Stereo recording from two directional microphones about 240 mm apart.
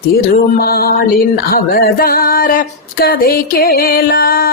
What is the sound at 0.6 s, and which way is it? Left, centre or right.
Speech, left.